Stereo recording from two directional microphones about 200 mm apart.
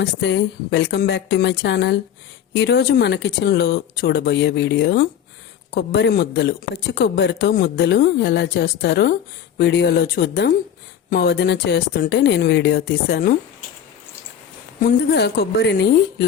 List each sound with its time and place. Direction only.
0.0 s speech: 60° left (ahead or behind)
14.8 s speech: 50° left (ahead or behind)